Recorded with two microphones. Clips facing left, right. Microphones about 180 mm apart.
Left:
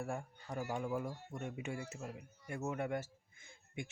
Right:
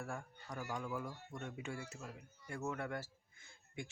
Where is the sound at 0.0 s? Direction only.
25° left (ahead or behind).